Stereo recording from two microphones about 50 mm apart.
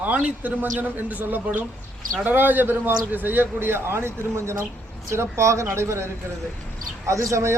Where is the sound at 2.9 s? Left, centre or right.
Right.